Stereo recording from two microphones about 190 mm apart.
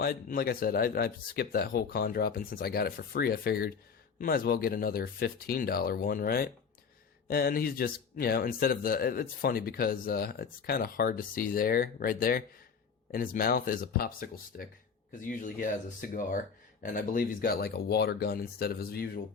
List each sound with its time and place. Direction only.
0.0 s speech: 50° left (ahead or behind)